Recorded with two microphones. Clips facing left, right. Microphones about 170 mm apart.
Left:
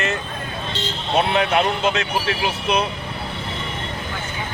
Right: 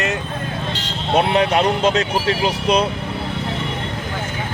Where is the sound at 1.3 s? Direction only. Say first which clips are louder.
Right 3 dB; 35° right (ahead or behind).